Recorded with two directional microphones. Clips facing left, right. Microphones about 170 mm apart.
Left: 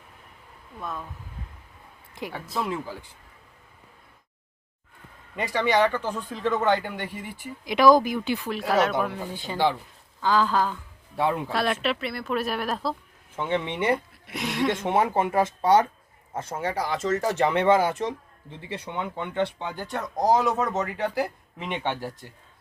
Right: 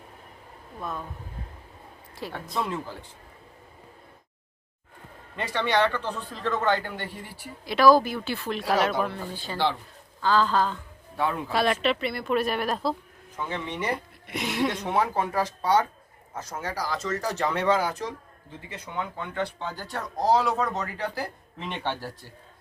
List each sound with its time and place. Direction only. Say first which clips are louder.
0.8 s speech: even; centre (ahead or behind)
2.3 s speech: left 1 dB; 5° left (ahead or behind)
5.4 s speech: left 2 dB; 10° left (ahead or behind)
9.0 s speech: left 1 dB; 15° left (ahead or behind)
11.2 s speech: left 3 dB; 25° left (ahead or behind)
11.5 s speech: right 2 dB; centre (ahead or behind)
13.3 s speech: left 5 dB; 25° left (ahead or behind)
13.9 s speech: left 4 dB; centre (ahead or behind)
14.8 s speech: left 3 dB; 25° left (ahead or behind)